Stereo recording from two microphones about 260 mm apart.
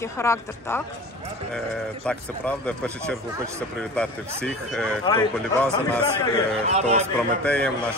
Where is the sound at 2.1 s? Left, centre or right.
Centre.